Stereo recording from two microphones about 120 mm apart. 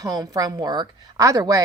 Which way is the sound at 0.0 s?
30° right (ahead or behind).